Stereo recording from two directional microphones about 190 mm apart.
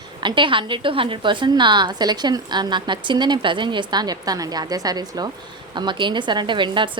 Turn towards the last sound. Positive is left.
turn(degrees=-25)  # may be behind; listen again after turning